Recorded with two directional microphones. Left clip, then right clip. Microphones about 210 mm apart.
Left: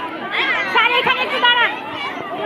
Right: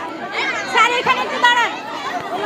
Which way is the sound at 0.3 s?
40° right (ahead or behind).